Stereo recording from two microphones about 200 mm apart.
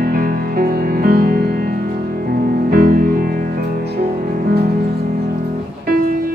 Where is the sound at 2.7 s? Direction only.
50° right (ahead or behind).